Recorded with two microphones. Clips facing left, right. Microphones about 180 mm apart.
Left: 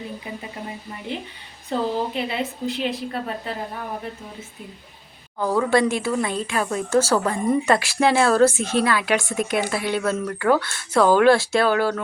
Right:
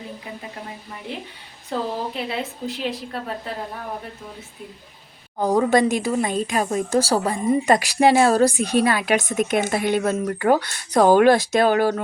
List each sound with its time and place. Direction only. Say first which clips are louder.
1.1 s a woman's voice: left 4 dB; centre (ahead or behind)
5.4 s a woman's voice: right 2 dB; 40° right (ahead or behind)
5.7 s speech: right 1 dB; 20° right (ahead or behind)
8.1 s a woman's voice: right 1 dB; 40° right (ahead or behind)
8.4 s speech: even; 15° right (ahead or behind)